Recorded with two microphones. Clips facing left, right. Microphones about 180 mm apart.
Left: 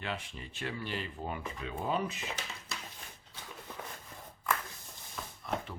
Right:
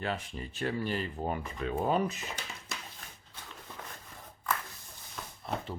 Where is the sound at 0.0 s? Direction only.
40° right (ahead or behind).